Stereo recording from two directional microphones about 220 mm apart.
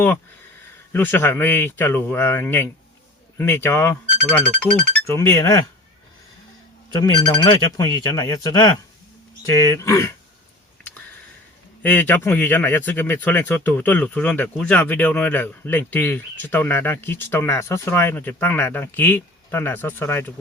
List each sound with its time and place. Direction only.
0.9 s speech: 10° left (ahead or behind)
6.9 s speech: 20° left (ahead or behind)
11.8 s speech: 10° left (ahead or behind)